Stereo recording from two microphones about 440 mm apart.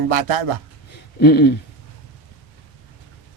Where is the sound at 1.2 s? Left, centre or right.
Left.